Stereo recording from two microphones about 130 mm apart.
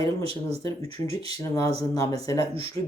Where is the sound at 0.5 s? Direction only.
30° left (ahead or behind).